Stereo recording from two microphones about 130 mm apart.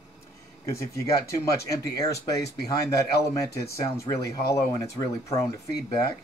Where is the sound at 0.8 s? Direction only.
25° left (ahead or behind).